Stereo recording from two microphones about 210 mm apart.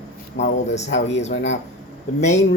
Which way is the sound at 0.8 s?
55° left (ahead or behind).